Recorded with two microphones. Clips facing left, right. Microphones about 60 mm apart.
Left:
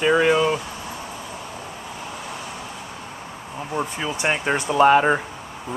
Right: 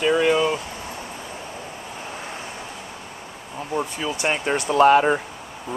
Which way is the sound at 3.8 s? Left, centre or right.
Centre.